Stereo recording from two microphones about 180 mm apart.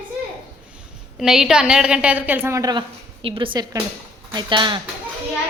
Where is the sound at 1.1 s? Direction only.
5° right (ahead or behind); by 4.8 s 25° right (ahead or behind).